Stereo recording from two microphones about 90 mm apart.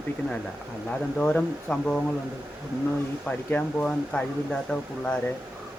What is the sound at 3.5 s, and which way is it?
Speech, 10° left (ahead or behind).